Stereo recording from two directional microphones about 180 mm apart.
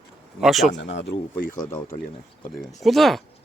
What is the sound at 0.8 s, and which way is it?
Speech, 90° left.